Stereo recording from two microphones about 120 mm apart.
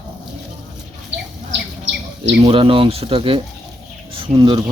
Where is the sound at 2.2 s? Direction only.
50° right (ahead or behind).